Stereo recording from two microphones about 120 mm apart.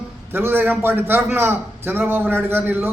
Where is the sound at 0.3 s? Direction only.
20° right (ahead or behind).